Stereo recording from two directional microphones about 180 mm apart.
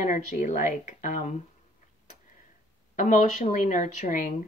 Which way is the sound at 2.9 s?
45° left (ahead or behind).